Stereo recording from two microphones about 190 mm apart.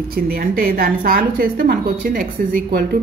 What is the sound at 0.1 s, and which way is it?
A woman's voice, 50° right (ahead or behind).